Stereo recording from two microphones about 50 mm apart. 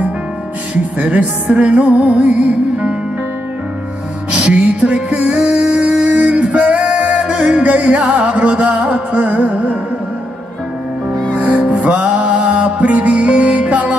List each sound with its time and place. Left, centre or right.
0.9 s music: right
4.3 s music: right
11.3 s music: right